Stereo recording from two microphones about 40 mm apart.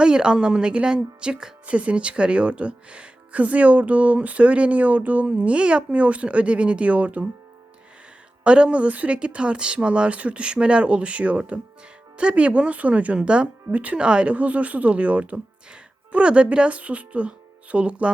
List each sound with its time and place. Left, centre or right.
0.0 s speech: right
1.6 s speech: right
8.4 s speech: right
13.1 s speech: right
13.7 s speech: right
14.3 s speech: right